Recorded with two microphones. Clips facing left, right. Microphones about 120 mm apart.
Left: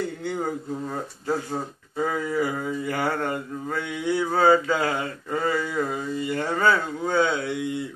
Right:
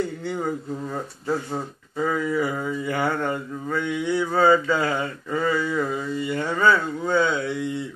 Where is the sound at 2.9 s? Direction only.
40° left (ahead or behind).